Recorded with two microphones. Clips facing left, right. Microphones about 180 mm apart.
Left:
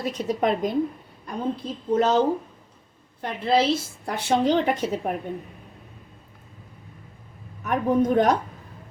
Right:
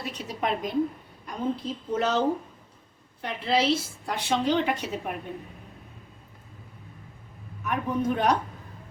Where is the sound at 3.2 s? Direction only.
50° left (ahead or behind).